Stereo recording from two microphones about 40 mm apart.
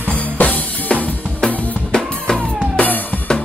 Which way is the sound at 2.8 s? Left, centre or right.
Left.